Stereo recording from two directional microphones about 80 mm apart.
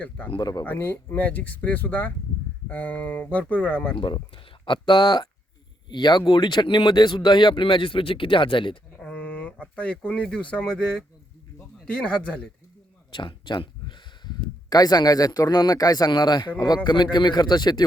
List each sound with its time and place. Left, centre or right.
0.6 s speech: left
3.9 s speech: left
9.0 s speech: centre
13.1 s speech: left